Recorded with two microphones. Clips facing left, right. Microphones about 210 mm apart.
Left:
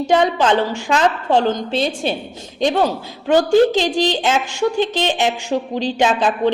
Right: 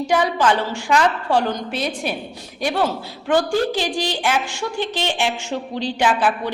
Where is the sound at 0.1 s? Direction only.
20° left (ahead or behind).